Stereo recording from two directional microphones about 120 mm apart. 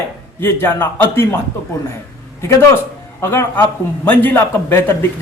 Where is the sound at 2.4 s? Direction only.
25° left (ahead or behind).